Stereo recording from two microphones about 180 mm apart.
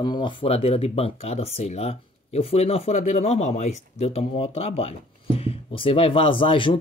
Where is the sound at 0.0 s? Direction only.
25° left (ahead or behind).